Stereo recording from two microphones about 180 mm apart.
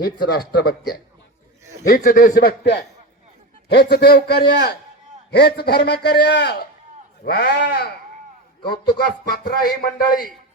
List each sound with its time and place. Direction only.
0.0 s a man's voice: 60° left (ahead or behind)
2.0 s a man's voice: 50° left (ahead or behind)